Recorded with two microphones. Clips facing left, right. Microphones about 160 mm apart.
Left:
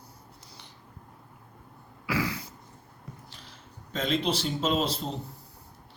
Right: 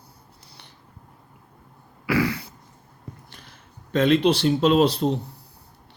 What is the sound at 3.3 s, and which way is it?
Speech, 55° right (ahead or behind).